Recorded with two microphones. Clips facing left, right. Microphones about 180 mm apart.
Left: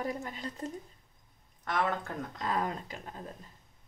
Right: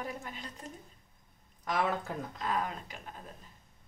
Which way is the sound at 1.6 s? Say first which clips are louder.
Even; 10° right (ahead or behind).